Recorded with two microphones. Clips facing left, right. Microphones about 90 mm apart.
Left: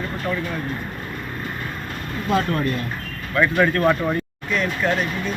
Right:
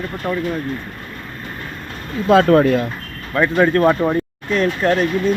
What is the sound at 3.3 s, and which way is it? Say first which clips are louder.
Speech: right 4 dB; 30° right (ahead or behind).